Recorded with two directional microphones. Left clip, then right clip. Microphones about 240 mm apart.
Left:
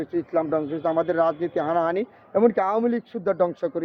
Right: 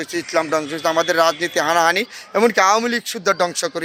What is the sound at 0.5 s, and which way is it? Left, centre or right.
Speech, centre.